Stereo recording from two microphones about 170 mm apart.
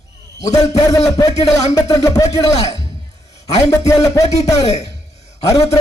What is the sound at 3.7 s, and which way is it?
Music, 20° left (ahead or behind).